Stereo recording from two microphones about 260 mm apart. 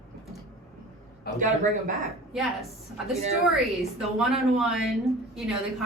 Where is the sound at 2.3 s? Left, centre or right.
Centre.